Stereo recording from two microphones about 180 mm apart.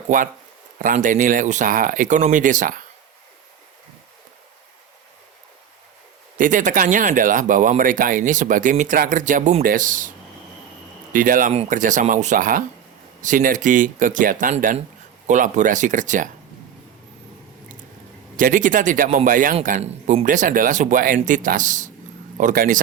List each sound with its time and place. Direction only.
0.1 s speech: 45° right (ahead or behind)
6.3 s speech: 45° right (ahead or behind)
18.3 s speech: 50° right (ahead or behind)